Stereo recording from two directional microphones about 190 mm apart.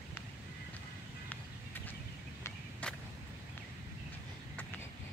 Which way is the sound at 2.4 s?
5° left (ahead or behind).